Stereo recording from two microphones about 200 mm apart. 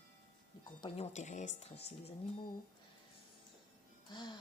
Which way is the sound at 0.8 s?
30° left (ahead or behind).